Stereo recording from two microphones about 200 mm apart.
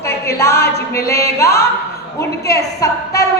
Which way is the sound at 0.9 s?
15° left (ahead or behind).